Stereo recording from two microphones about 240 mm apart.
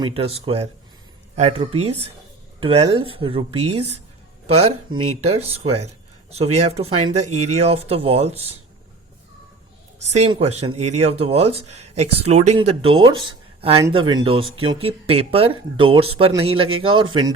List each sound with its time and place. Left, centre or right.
0.0 s speech: right
10.1 s speech: right